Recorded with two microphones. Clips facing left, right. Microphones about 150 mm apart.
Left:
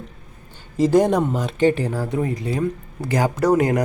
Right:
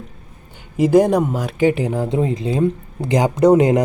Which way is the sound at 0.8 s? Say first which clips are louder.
Right 3 dB; 10° right (ahead or behind).